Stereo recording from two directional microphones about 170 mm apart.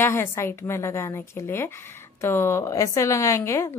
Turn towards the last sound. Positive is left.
turn(degrees=15)  # may be behind; listen again after turning